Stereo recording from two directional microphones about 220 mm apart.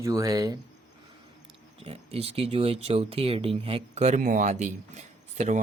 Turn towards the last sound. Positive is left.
turn(degrees=-30)  # may be behind; listen again after turning